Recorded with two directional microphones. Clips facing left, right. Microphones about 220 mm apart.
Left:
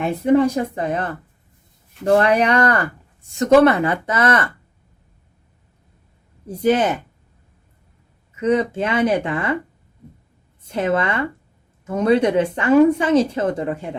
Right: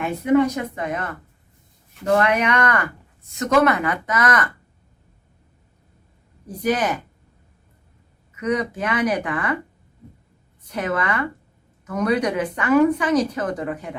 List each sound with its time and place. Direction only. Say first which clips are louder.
0.0 s a woman's voice: left 2 dB; 30° left (ahead or behind)
6.6 s a woman's voice: left 5 dB; 25° left (ahead or behind)
8.4 s a woman's voice: left 5 dB; 25° left (ahead or behind)
10.7 s a woman's voice: left 4 dB; 25° left (ahead or behind)